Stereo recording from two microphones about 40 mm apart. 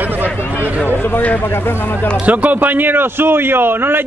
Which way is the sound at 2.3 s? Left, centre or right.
Right.